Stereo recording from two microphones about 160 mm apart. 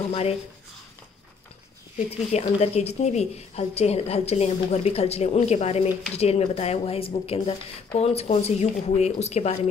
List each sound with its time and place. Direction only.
0.1 s speech: 40° left (ahead or behind)
2.0 s a woman's voice: 40° left (ahead or behind)